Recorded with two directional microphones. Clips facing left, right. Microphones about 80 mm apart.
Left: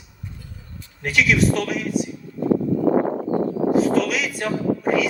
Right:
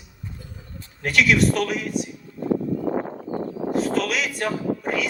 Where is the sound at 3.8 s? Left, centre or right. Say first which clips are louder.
Left 3 dB; centre.